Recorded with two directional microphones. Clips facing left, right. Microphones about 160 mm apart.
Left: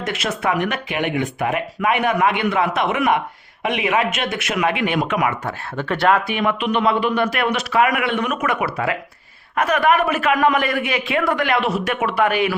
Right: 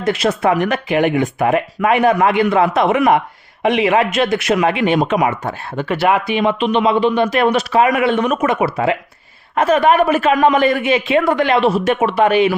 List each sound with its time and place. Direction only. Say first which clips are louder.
0.0 s speech: right 7 dB; 30° right (ahead or behind)
5.8 s a man's voice: right 2 dB; 5° right (ahead or behind); by 12.5 s 25° right (ahead or behind)